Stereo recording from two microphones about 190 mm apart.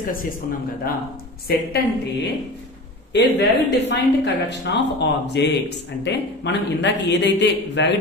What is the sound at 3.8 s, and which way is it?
A woman's voice, 65° left (ahead or behind).